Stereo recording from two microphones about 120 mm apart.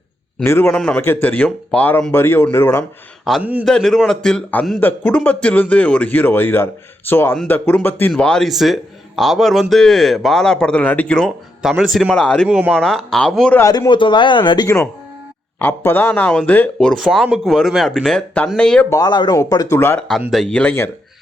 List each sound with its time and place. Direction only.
0.4 s speech: 20° left (ahead or behind)
0.7 s speech: 5° left (ahead or behind)
3.3 s a man's voice: 5° left (ahead or behind)
4.8 s speech: 15° left (ahead or behind)
8.1 s a man's voice: 5° left (ahead or behind)
11.8 s a man's voice: 5° right (ahead or behind)
12.2 s speech: 10° left (ahead or behind)
12.5 s speech: 10° right (ahead or behind)
12.7 s a man's voice: 5° left (ahead or behind)
13.6 s speech: 30° left (ahead or behind)
15.5 s speech: 15° left (ahead or behind)
17.0 s a man's voice: centre (ahead or behind)
18.9 s speech: 35° left (ahead or behind)
20.0 s a man's voice: 5° left (ahead or behind)